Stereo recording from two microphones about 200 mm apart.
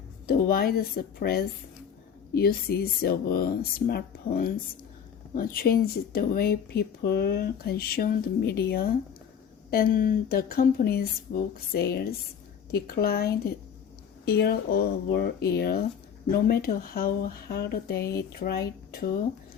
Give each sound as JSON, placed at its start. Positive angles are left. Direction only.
{"t": 0.3, "sound": "speech", "side_deg": 50}